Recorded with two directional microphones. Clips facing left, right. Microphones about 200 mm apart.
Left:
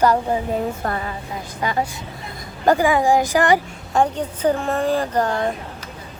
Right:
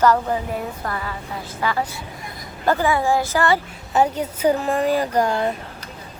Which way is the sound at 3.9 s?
5° right (ahead or behind).